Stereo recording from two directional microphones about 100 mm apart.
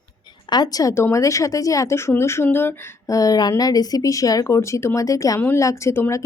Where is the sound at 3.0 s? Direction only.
35° left (ahead or behind).